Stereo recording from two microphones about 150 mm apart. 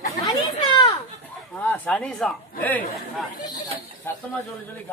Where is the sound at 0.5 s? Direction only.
35° left (ahead or behind).